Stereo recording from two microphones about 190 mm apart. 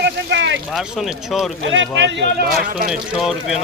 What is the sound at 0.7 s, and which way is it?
Speech, centre (ahead or behind).